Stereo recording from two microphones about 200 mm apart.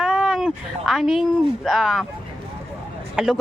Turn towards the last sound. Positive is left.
turn(degrees=0)  # may be behind; listen again after turning